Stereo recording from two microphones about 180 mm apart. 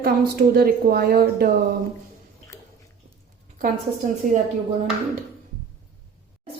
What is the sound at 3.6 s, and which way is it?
Speech, 50° right (ahead or behind).